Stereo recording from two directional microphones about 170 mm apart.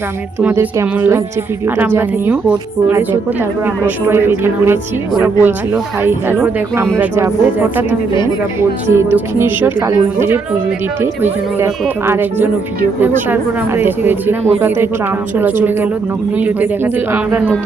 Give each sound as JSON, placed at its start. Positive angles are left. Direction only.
{"t": 0.4, "sound": "speech", "side_deg": -10}
{"t": 15.4, "sound": "speech", "side_deg": -10}